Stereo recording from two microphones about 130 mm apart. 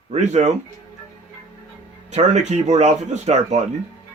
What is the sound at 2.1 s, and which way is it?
A man's voice, 60° right (ahead or behind).